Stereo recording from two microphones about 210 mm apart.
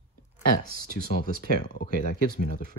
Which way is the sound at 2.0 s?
40° left (ahead or behind).